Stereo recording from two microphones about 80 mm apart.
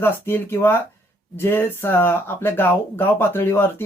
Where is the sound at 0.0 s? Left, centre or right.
Left.